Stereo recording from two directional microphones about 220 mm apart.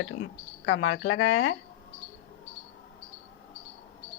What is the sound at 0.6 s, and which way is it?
Speech, 65° left (ahead or behind).